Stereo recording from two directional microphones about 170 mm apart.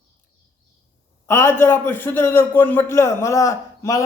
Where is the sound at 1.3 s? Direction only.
15° left (ahead or behind).